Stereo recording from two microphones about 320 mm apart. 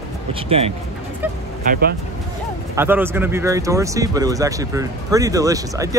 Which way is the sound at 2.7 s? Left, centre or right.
Centre.